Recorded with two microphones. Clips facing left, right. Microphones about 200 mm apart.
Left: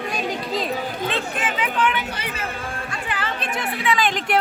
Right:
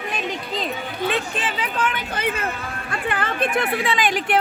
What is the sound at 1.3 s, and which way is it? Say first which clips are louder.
Speech: left 2 dB; 35° right (ahead or behind).